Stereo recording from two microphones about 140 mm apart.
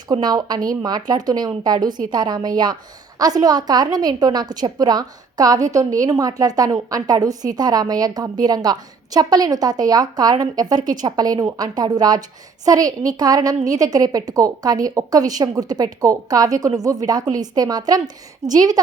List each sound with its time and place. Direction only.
0.1 s a woman's voice: 30° right (ahead or behind)